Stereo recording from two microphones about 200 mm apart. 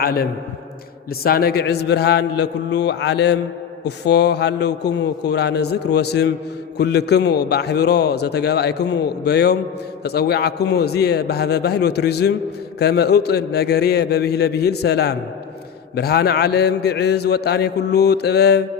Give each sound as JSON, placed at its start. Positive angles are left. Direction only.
{"t": 0.0, "sound": "a man's voice", "side_deg": 50}